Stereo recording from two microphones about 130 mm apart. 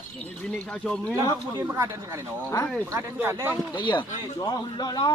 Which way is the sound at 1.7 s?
20° right (ahead or behind).